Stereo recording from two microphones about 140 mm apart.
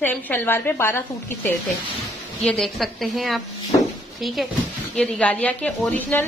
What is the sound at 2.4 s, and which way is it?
A woman's voice, 5° left (ahead or behind).